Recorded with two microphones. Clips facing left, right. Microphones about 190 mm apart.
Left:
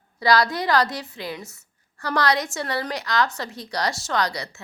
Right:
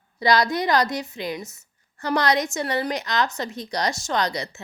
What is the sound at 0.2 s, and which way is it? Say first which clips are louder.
A woman's voice: even; 20° right (ahead or behind).